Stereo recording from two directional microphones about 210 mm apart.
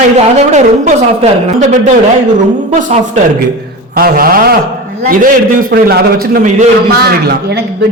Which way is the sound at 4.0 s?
45° right (ahead or behind).